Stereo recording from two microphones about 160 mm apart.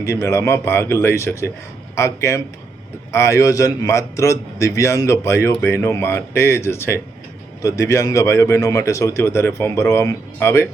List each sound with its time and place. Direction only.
0.0 s a man's voice: 20° left (ahead or behind)